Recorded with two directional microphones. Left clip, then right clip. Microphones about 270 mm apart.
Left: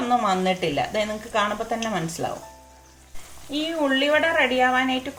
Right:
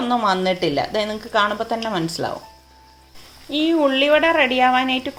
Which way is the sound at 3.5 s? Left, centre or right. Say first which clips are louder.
Right 6 dB; right.